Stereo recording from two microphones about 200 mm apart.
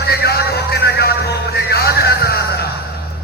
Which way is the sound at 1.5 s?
55° left (ahead or behind).